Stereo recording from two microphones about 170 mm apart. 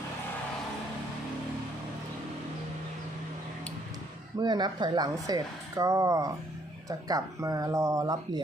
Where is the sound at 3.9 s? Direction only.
25° right (ahead or behind).